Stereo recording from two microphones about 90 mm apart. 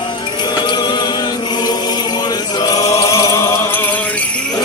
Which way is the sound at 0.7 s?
50° left (ahead or behind).